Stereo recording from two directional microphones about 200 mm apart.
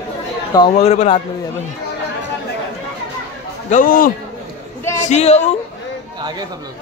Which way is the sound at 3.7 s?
40° left (ahead or behind).